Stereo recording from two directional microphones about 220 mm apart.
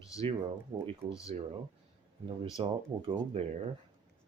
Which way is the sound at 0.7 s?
25° right (ahead or behind).